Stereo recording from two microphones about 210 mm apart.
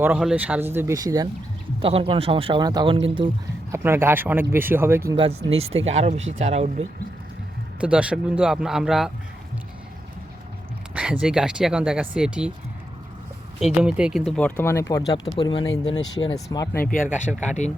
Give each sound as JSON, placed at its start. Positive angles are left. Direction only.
{"t": 0.0, "sound": "speech", "side_deg": -5}
{"t": 3.7, "sound": "speech", "side_deg": -10}
{"t": 5.1, "sound": "speech", "side_deg": -25}
{"t": 7.8, "sound": "speech", "side_deg": -5}
{"t": 10.9, "sound": "speech", "side_deg": -5}
{"t": 13.6, "sound": "speech", "side_deg": -5}
{"t": 16.9, "sound": "speech", "side_deg": 40}